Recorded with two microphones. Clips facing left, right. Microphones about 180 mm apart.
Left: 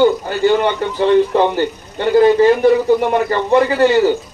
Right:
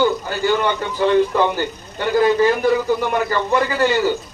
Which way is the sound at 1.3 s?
30° left (ahead or behind).